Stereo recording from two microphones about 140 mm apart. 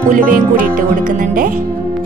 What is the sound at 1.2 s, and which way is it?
Speech, 75° right (ahead or behind).